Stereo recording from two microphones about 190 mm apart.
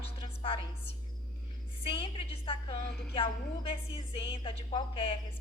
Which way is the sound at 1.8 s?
30° left (ahead or behind).